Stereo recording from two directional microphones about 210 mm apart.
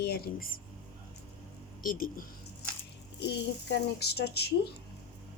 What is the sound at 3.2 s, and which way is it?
Speech, 55° left (ahead or behind).